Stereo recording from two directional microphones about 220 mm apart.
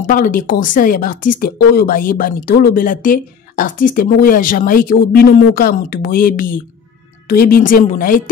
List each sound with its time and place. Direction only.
0.0 s speech: 40° left (ahead or behind)